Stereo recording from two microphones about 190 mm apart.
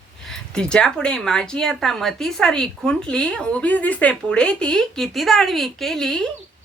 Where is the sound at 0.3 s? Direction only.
5° left (ahead or behind).